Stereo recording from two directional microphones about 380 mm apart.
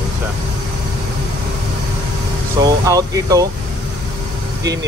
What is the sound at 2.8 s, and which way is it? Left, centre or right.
Speech, centre.